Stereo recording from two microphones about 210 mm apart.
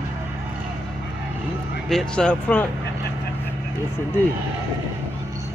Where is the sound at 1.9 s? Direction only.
5° left (ahead or behind).